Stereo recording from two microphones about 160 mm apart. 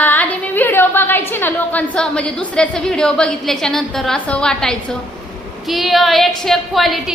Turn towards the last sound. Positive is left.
turn(degrees=0)  # may be behind; listen again after turning